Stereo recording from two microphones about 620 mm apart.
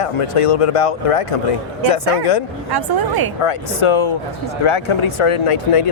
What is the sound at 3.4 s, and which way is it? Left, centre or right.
Speech, left.